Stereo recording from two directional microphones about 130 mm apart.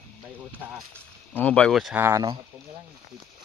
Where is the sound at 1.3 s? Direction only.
10° left (ahead or behind).